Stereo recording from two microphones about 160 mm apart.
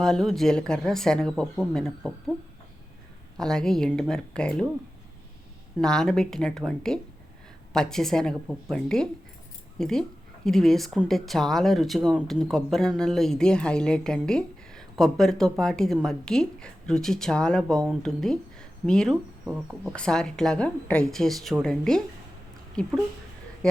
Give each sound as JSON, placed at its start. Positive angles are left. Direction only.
{"t": 0.0, "sound": "a woman's voice", "side_deg": 0}
{"t": 3.3, "sound": "a woman's voice", "side_deg": 5}
{"t": 5.8, "sound": "a woman's voice", "side_deg": 5}